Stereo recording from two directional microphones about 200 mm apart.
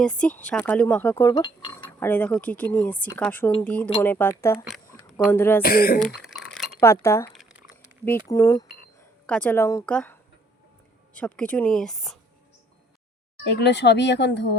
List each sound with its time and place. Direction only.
0.0 s speech: 5° left (ahead or behind); by 1.8 s 20° left (ahead or behind)
2.0 s speech: 10° left (ahead or behind)
5.6 s speech: 50° left (ahead or behind)
6.2 s a sound: centre (ahead or behind)
6.7 s speech: 15° left (ahead or behind)
13.4 s speech: 60° left (ahead or behind)